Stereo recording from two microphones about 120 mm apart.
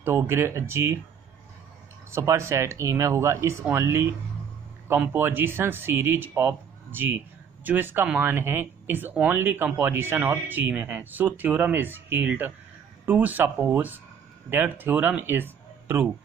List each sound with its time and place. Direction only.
0.0 s speech: 20° right (ahead or behind)
2.0 s speech: 25° right (ahead or behind)